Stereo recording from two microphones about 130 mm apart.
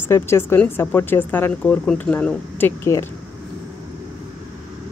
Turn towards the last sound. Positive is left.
turn(degrees=20)  # may be behind; listen again after turning